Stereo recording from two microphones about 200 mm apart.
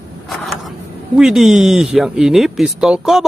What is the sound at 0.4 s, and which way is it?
Speech, centre (ahead or behind).